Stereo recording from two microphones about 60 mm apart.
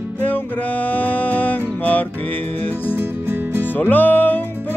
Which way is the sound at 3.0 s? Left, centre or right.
Right.